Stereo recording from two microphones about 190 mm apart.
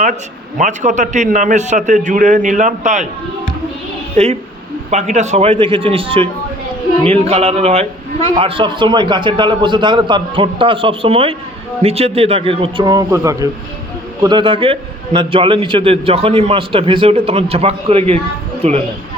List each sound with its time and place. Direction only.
0.6 s a man's voice: 40° right (ahead or behind)
4.2 s a man's voice: 35° right (ahead or behind)